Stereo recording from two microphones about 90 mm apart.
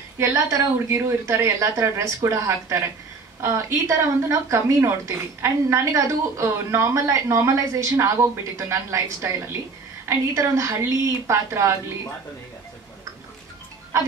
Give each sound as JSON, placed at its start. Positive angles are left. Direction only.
{"t": 0.2, "sound": "speech", "side_deg": -40}